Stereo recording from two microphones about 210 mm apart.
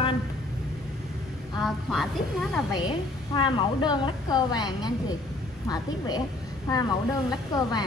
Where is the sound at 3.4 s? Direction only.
20° left (ahead or behind).